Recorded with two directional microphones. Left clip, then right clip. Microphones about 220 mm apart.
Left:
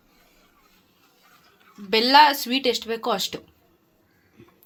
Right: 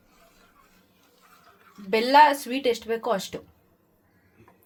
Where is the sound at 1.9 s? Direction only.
Centre (ahead or behind).